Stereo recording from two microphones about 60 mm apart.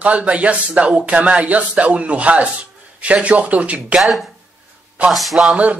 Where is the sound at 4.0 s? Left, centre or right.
Centre.